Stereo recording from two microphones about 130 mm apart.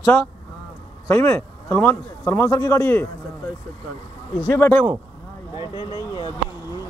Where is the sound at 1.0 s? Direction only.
20° left (ahead or behind).